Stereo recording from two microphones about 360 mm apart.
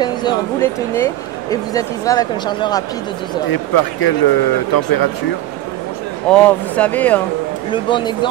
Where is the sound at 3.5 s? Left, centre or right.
Left.